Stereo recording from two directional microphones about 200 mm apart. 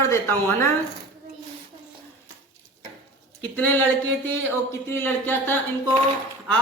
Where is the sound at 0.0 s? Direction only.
10° left (ahead or behind).